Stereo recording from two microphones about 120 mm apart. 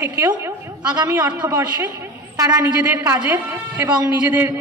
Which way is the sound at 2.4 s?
25° right (ahead or behind).